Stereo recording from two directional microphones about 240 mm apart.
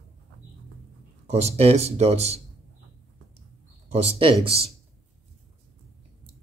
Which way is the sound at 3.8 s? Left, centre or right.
Right.